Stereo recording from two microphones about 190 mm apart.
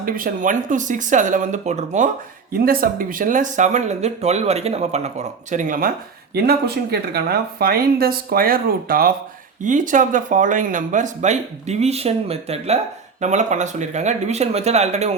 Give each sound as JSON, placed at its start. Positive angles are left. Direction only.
{"t": 0.0, "sound": "speech", "side_deg": -45}
{"t": 2.5, "sound": "speech", "side_deg": -50}
{"t": 6.3, "sound": "speech", "side_deg": -55}